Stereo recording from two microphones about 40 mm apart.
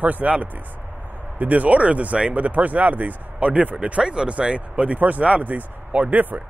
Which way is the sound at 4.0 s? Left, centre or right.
Right.